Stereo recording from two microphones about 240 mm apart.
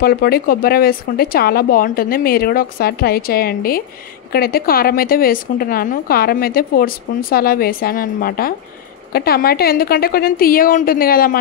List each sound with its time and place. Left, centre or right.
0.0 s a woman's voice: left